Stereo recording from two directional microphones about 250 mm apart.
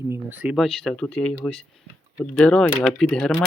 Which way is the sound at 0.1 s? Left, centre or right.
Centre.